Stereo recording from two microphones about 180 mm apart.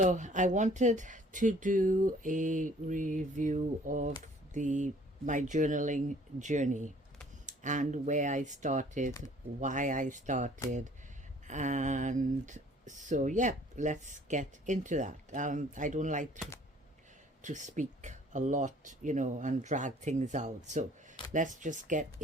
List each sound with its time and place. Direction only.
0.0 s speech: 45° right (ahead or behind)
17.4 s speech: 45° right (ahead or behind)